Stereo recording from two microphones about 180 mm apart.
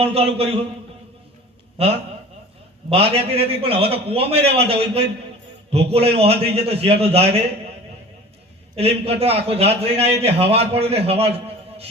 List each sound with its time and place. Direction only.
0.0 s a man's voice: 35° right (ahead or behind)
1.8 s a man's voice: 35° right (ahead or behind)
5.7 s a man's voice: 35° right (ahead or behind)
8.7 s a man's voice: 35° right (ahead or behind)